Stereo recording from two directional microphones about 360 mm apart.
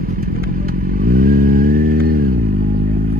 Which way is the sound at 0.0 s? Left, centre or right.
Right.